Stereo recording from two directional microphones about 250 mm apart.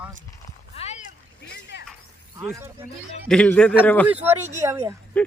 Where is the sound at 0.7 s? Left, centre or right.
Left.